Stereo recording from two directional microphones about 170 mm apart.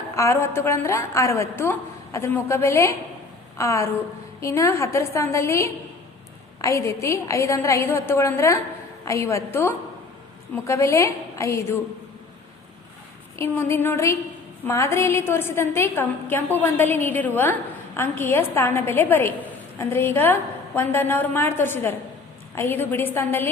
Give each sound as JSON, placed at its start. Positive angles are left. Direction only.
{"t": 0.2, "sound": "a woman's voice", "side_deg": 15}
{"t": 13.3, "sound": "a woman's voice", "side_deg": 15}